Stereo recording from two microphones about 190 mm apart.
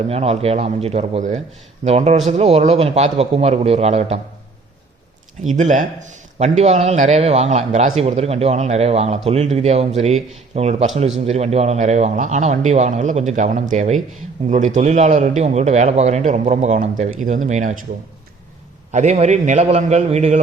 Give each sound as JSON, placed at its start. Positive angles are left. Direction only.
{"t": 0.1, "sound": "a man's voice", "side_deg": -30}
{"t": 5.5, "sound": "a man's voice", "side_deg": -40}
{"t": 18.9, "sound": "a man's voice", "side_deg": -35}